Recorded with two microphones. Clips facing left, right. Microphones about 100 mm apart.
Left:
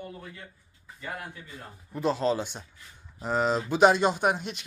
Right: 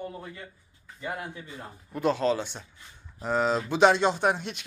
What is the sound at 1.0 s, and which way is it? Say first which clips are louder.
Speech: right 3 dB; 20° right (ahead or behind).